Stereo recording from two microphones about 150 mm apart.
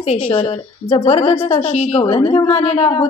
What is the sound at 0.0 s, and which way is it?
A woman's voice, 40° left (ahead or behind).